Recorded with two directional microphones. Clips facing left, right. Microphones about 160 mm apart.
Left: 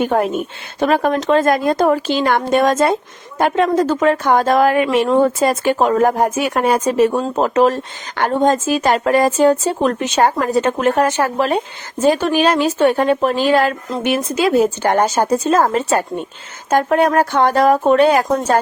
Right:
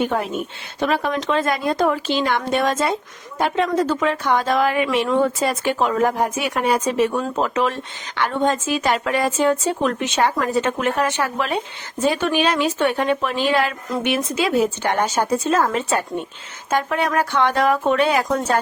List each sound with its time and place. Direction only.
0.0 s a woman's voice: 45° left (ahead or behind)